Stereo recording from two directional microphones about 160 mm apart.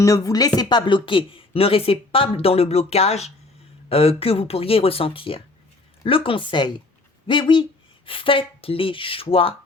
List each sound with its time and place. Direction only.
0.0 s speech: 20° left (ahead or behind)